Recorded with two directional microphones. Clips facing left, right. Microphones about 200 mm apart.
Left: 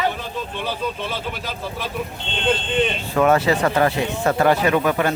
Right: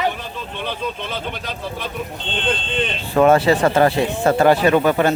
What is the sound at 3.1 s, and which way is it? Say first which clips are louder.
Speech: right 4 dB; 30° right (ahead or behind).